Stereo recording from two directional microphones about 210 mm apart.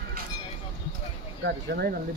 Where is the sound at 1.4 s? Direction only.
50° right (ahead or behind).